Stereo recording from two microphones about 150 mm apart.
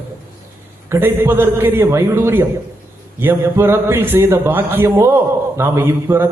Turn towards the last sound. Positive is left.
turn(degrees=-15)  # may be behind; listen again after turning